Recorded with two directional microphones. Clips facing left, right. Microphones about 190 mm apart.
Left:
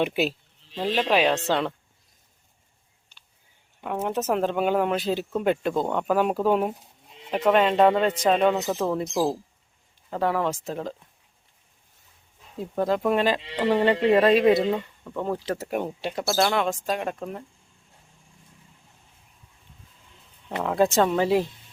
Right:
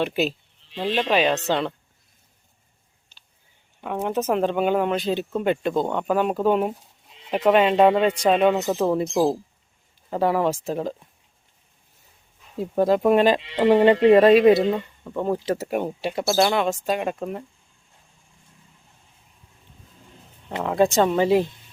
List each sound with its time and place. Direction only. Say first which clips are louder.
0.0 s speech: right 1 dB; 10° left (ahead or behind)
3.8 s speech: right 2 dB; 5° left (ahead or behind)
12.7 s speech: right 5 dB; 15° right (ahead or behind)
20.6 s speech: right 2 dB; centre (ahead or behind)